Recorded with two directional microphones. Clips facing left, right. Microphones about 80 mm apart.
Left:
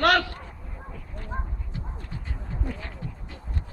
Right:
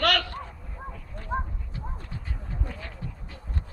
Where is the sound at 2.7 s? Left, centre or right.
Centre.